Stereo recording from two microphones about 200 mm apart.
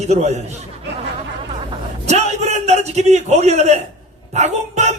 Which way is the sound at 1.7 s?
35° right (ahead or behind).